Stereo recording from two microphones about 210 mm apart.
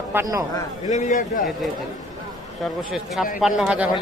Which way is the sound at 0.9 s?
35° left (ahead or behind).